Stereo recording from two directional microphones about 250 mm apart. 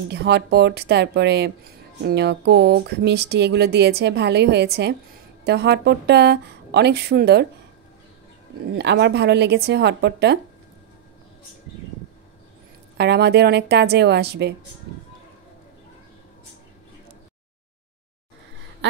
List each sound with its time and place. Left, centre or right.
0.1 s speech: right
8.7 s speech: right
12.9 s speech: right